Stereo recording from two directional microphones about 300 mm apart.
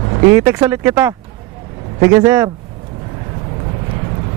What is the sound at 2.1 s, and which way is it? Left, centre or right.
Speech, centre.